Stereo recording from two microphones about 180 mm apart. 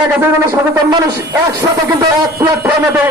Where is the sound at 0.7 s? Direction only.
25° right (ahead or behind).